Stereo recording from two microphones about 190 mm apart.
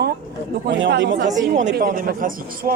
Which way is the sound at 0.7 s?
75° right (ahead or behind).